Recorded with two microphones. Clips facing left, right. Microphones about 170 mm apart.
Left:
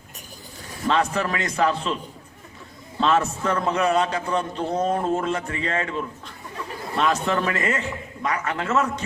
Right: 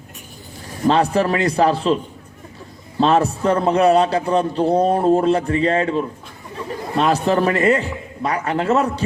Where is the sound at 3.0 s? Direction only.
35° right (ahead or behind).